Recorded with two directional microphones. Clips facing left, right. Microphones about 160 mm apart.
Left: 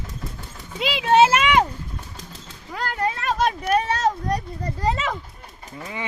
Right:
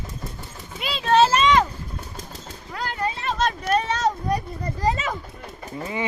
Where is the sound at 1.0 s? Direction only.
15° left (ahead or behind).